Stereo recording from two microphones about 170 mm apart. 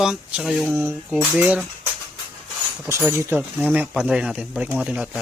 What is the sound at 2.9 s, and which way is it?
Speech, 15° right (ahead or behind).